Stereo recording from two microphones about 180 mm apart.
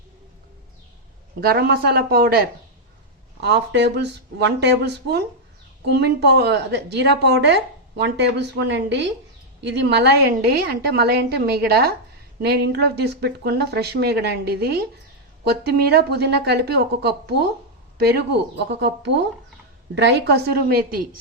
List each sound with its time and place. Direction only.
1.4 s speech: 60° right (ahead or behind)
3.4 s a woman's voice: 70° right (ahead or behind); by 21.1 s 55° right (ahead or behind)